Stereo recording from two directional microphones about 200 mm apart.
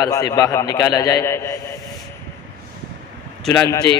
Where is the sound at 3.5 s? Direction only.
15° left (ahead or behind).